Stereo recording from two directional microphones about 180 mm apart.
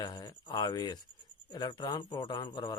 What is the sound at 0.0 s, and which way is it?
Speech, 20° left (ahead or behind).